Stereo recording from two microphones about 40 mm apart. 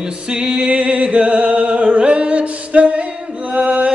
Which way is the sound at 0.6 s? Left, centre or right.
Right.